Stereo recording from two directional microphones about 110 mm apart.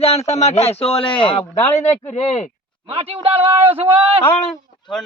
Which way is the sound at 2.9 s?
60° right (ahead or behind).